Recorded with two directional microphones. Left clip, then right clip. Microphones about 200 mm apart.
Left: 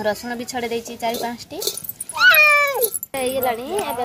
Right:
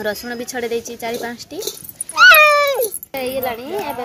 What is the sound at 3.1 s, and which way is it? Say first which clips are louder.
Speech: left 3 dB; 25° left (ahead or behind).